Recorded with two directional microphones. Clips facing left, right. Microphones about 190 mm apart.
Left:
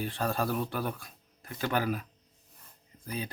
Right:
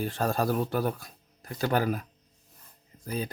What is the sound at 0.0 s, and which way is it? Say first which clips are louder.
Speech: right 3 dB; 45° right (ahead or behind).